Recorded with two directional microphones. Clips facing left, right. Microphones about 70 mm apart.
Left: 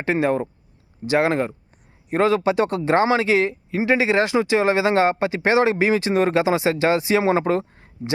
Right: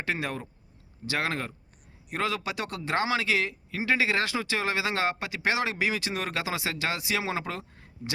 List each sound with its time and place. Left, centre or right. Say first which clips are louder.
0.0 s a man's voice: left 11 dB; left